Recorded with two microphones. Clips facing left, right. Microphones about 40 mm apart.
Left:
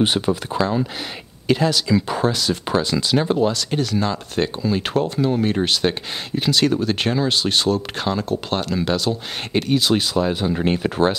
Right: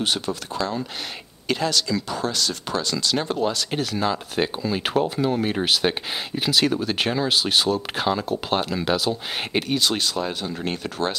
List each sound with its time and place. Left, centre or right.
0.0 s speech: centre
2.0 s speech: left
2.3 s speech: centre